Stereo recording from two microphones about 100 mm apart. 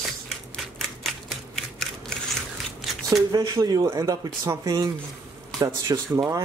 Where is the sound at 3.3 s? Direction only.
40° right (ahead or behind).